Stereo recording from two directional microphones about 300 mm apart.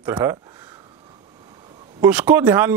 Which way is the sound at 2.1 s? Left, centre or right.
Centre.